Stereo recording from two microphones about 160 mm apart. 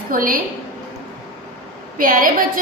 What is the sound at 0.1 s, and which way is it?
Speech, 60° right (ahead or behind).